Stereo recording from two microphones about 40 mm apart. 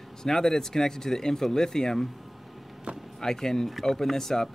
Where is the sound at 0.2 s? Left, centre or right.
Centre.